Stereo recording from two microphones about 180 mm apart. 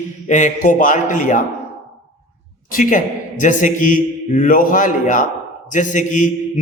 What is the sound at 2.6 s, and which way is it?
A man's voice, 50° left (ahead or behind).